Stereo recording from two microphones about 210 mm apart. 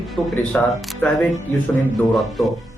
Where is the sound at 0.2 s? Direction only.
Centre (ahead or behind).